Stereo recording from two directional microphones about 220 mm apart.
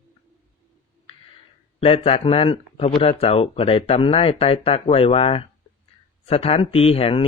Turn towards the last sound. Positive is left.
turn(degrees=25)  # may be behind; listen again after turning